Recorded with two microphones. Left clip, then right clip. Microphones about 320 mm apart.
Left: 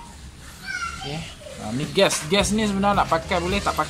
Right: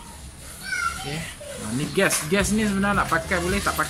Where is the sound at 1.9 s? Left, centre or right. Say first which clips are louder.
Left 3 dB; centre.